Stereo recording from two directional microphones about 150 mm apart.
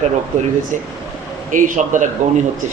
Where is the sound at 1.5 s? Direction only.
60° right (ahead or behind).